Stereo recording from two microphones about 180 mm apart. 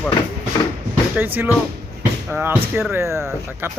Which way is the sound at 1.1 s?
10° right (ahead or behind).